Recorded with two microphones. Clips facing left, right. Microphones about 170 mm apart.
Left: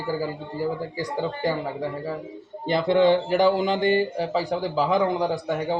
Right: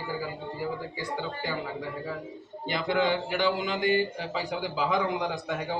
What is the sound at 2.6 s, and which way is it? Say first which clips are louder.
Speech: left 8 dB; 35° left (ahead or behind).